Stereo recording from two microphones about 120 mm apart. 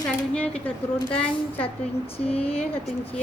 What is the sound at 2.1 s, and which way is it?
Speech, 55° left (ahead or behind).